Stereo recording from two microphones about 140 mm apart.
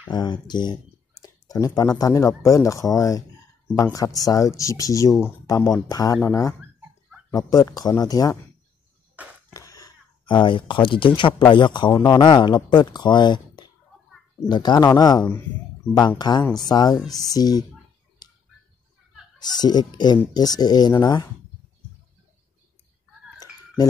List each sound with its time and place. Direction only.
0.1 s speech: 30° left (ahead or behind)
1.2 s a sound: 25° left (ahead or behind)
2.0 s speech: 25° left (ahead or behind)
9.5 s speech: 25° left (ahead or behind)
18.2 s a sound: 25° left (ahead or behind)
19.3 s speech: 30° left (ahead or behind)